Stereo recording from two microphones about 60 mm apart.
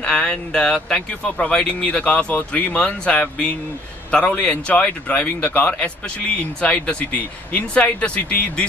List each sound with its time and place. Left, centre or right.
0.0 s speech: centre